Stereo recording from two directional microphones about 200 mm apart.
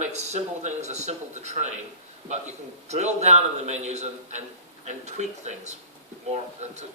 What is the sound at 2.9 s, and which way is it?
A man's voice, 35° right (ahead or behind).